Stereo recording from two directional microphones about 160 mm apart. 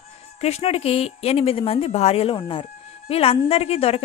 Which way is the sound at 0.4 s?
40° left (ahead or behind).